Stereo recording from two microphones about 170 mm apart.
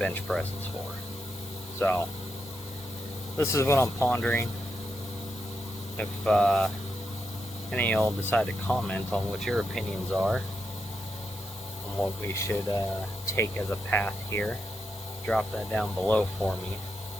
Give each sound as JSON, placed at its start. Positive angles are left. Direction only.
{"t": 0.0, "sound": "speech", "side_deg": 5}
{"t": 1.8, "sound": "speech", "side_deg": 10}
{"t": 3.3, "sound": "speech", "side_deg": 15}
{"t": 6.0, "sound": "speech", "side_deg": 5}
{"t": 7.7, "sound": "speech", "side_deg": 5}
{"t": 12.3, "sound": "speech", "side_deg": 15}